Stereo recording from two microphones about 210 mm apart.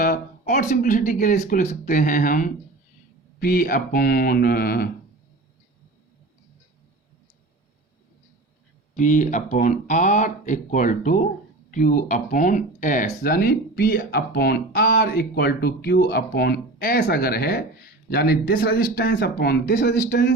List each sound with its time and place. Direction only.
0.0 s speech: 40° left (ahead or behind)
9.0 s speech: 35° left (ahead or behind)